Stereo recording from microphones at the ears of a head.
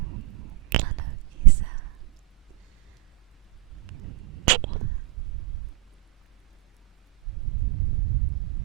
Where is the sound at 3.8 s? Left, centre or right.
Right.